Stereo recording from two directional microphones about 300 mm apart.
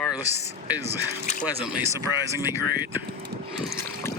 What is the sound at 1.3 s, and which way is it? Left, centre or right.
Speech, left.